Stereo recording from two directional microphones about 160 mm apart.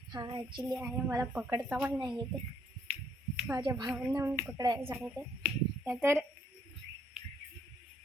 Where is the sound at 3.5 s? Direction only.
25° right (ahead or behind).